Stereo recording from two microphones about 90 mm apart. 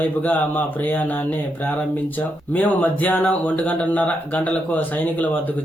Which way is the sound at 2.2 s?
15° left (ahead or behind).